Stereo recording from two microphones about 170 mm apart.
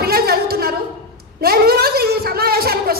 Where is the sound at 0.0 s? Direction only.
65° right (ahead or behind).